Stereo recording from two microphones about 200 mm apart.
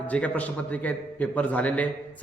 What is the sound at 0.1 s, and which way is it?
A man's voice, 5° left (ahead or behind).